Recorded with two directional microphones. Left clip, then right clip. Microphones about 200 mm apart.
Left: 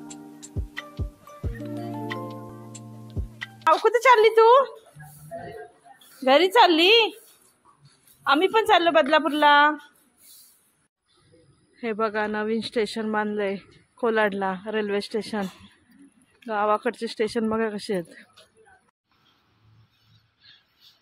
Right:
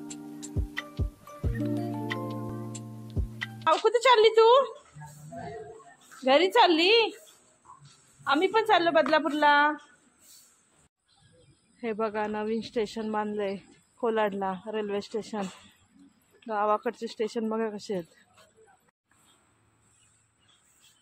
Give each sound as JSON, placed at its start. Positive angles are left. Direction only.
{"t": 0.0, "sound": "music", "side_deg": 0}
{"t": 3.6, "sound": "speech", "side_deg": 10}
{"t": 6.2, "sound": "speech", "side_deg": 15}
{"t": 8.2, "sound": "speech", "side_deg": 20}
{"t": 11.8, "sound": "speech", "side_deg": 20}